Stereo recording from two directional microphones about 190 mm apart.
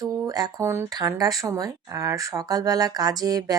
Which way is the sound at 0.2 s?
20° right (ahead or behind).